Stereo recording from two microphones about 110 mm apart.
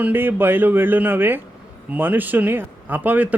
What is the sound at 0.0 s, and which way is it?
A man's voice, 20° right (ahead or behind).